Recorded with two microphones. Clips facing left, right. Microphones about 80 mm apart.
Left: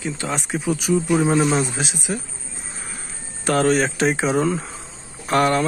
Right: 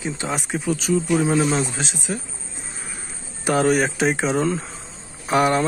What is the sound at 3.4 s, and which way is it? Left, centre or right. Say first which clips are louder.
Speech: even; centre.